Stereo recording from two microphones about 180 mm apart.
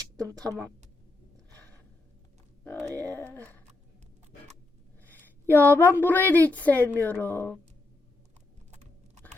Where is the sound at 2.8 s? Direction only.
20° right (ahead or behind).